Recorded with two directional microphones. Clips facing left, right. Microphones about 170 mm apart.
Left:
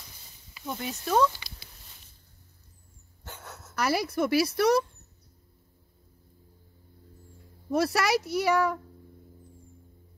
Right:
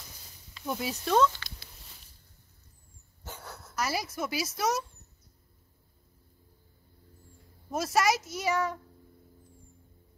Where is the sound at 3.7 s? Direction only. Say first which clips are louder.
Left 6 dB; 60° left (ahead or behind).